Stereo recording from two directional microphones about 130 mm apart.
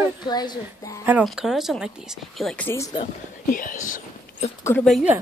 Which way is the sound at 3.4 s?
90° left.